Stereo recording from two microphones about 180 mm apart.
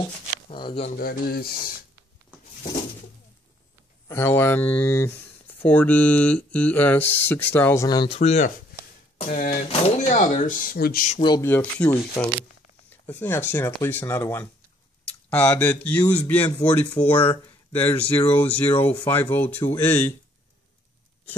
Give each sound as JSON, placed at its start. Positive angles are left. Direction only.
{"t": 0.5, "sound": "speech", "side_deg": 30}
{"t": 0.9, "sound": "speech", "side_deg": 55}
{"t": 4.1, "sound": "speech", "side_deg": 15}
{"t": 11.2, "sound": "speech", "side_deg": 15}